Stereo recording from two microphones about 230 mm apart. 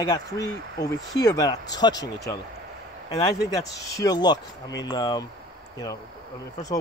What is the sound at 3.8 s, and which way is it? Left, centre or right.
Speech, centre.